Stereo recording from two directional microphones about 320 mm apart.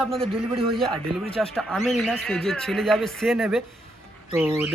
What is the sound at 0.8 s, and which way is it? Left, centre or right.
Speech, centre.